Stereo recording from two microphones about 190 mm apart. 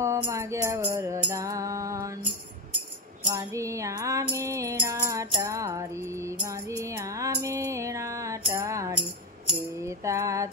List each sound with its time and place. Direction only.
0.0 s music: 15° right (ahead or behind)
3.3 s music: 15° right (ahead or behind)